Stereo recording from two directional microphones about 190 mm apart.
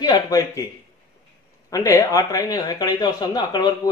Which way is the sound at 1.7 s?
20° left (ahead or behind).